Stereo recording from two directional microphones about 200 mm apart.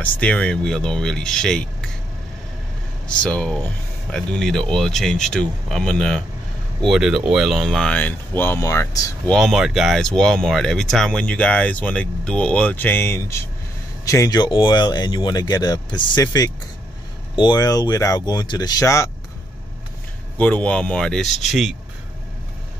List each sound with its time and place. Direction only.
0.0 s speech: 5° left (ahead or behind)
3.2 s speech: 5° left (ahead or behind)
20.3 s speech: 5° left (ahead or behind)